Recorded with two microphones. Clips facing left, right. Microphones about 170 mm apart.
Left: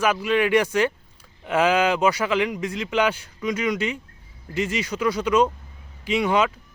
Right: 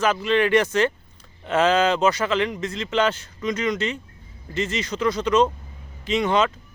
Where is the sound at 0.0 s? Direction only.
10° left (ahead or behind).